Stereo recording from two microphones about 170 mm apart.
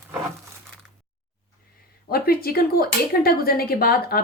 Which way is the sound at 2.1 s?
60° left (ahead or behind).